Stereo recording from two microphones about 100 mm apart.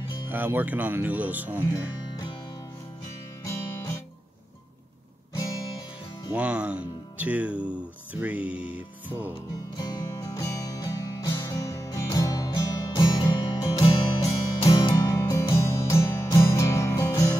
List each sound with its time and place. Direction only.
0.3 s speech: 20° right (ahead or behind)
3.4 s music: 30° left (ahead or behind)
5.3 s music: 40° left (ahead or behind)
6.3 s speech: 10° right (ahead or behind)
9.8 s music: 40° left (ahead or behind)
13.8 s music: 65° left (ahead or behind)
14.7 s music: 45° left (ahead or behind)